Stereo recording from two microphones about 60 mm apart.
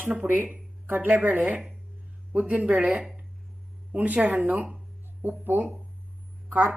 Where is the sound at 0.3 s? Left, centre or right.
Right.